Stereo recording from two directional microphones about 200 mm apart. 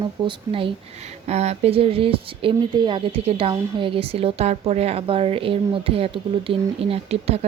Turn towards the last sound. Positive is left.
turn(degrees=-30)  # may be behind; listen again after turning